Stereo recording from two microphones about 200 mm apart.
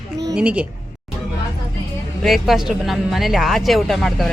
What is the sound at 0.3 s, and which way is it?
Speech, 5° right (ahead or behind).